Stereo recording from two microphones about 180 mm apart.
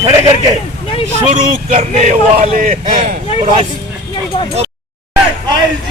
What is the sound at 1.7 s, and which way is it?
Speech, 40° right (ahead or behind).